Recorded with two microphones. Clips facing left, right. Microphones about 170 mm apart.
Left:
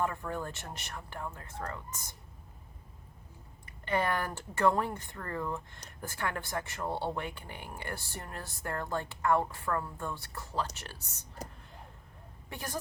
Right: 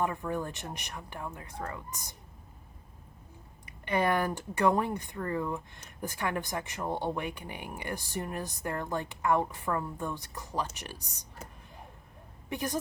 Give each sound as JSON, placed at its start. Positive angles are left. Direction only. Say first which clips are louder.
{"t": 0.0, "sound": "speech", "louder": "right 2 dB", "side_deg": -15}
{"t": 3.7, "sound": "speech", "louder": "right 3 dB", "side_deg": -15}
{"t": 12.5, "sound": "speech", "louder": "right 6 dB", "side_deg": -15}